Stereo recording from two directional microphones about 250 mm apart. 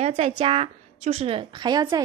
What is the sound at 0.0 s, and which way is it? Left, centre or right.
A woman's voice, right.